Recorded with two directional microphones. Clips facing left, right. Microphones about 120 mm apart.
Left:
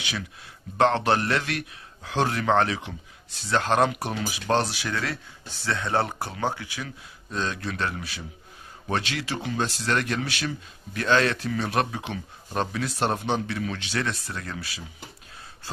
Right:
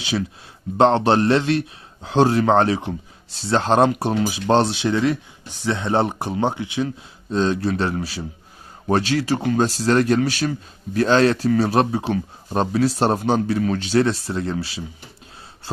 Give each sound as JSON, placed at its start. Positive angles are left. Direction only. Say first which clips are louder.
{"t": 0.0, "sound": "speech", "louder": "right 10 dB", "side_deg": -30}